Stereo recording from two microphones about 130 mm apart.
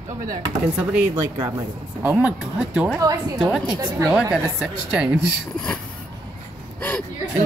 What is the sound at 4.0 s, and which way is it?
Speech, 25° right (ahead or behind).